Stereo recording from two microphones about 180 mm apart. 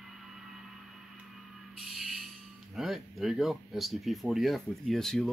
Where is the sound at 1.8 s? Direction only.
Centre (ahead or behind).